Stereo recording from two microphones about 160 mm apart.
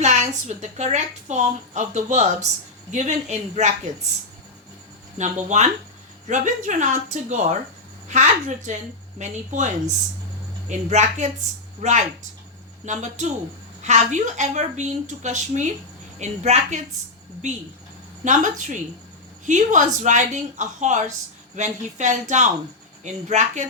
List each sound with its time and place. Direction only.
0.0 s a woman's voice: 45° right (ahead or behind)
5.1 s a woman's voice: 45° right (ahead or behind)